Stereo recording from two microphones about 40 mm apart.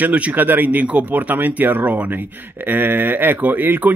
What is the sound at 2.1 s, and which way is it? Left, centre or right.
Speech, right.